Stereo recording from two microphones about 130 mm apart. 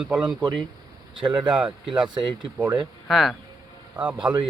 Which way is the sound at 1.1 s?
40° right (ahead or behind).